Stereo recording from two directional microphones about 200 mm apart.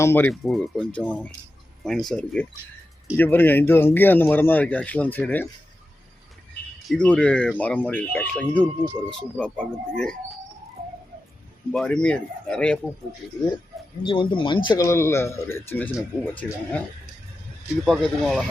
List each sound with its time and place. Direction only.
0.0 s speech: 10° left (ahead or behind)
0.4 s speech: centre (ahead or behind)
6.8 s speech: 5° left (ahead or behind)
11.7 s speech: 5° left (ahead or behind)
14.0 s speech: 25° left (ahead or behind); by 16.8 s 5° left (ahead or behind)
17.8 s speech: centre (ahead or behind)